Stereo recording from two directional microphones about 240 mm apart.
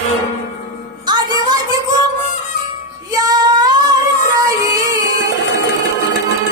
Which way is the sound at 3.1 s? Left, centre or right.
Centre.